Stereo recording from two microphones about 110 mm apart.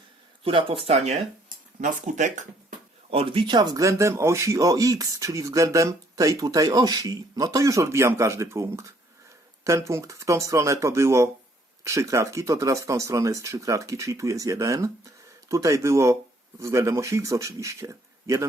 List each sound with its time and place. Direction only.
0.4 s speech: 55° right (ahead or behind); by 1.2 s 75° right (ahead or behind)
3.1 s speech: 60° right (ahead or behind); by 18.4 s 30° right (ahead or behind)